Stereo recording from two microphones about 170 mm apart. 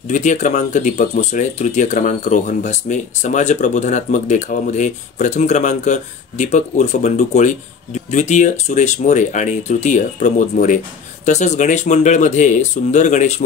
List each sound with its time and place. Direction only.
0.1 s speech: 45° left (ahead or behind)